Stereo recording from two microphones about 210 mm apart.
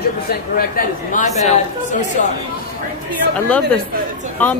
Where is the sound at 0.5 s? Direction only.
40° left (ahead or behind).